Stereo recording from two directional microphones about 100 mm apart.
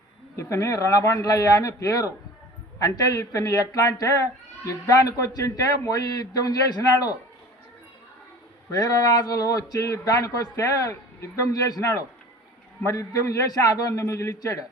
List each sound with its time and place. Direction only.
0.3 s speech: 30° left (ahead or behind)
8.7 s speech: 35° left (ahead or behind)